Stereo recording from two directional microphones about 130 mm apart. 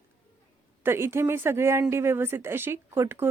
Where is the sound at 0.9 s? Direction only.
20° right (ahead or behind).